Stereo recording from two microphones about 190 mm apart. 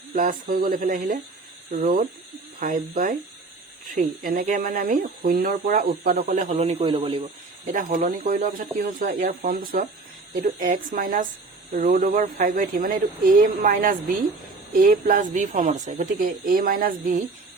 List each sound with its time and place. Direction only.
0.1 s speech: 45° right (ahead or behind)